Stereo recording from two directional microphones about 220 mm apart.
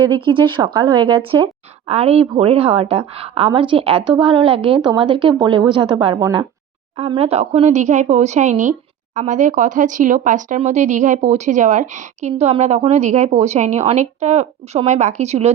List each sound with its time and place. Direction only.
0.0 s speech: 20° right (ahead or behind)